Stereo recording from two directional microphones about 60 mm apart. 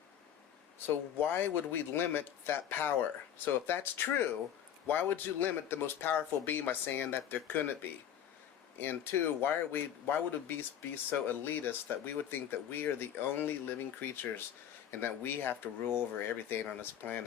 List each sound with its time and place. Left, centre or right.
0.9 s speech: left